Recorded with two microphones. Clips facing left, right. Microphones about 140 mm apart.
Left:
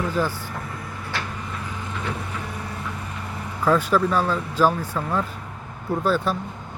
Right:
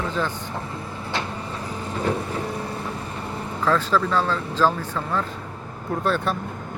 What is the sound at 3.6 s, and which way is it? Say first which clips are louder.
Speech: left 2 dB; 10° left (ahead or behind).